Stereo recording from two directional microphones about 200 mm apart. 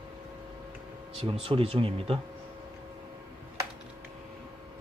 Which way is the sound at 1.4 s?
25° right (ahead or behind).